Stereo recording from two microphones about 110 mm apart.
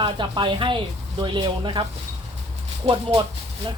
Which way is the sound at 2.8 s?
55° right (ahead or behind).